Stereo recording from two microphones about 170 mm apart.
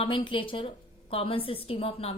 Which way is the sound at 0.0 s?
30° left (ahead or behind).